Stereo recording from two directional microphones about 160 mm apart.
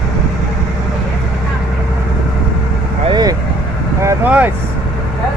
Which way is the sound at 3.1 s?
25° right (ahead or behind).